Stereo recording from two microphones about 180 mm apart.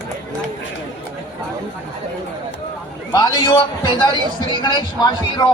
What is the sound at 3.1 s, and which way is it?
A man's voice, 20° left (ahead or behind).